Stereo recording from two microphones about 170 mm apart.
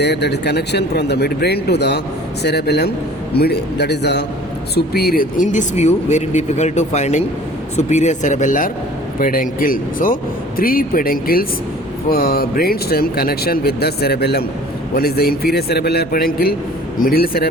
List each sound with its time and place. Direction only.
0.0 s speech: 80° left
4.7 s speech: 65° left (ahead or behind)